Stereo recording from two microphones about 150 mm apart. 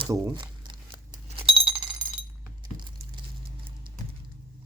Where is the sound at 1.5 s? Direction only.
5° right (ahead or behind).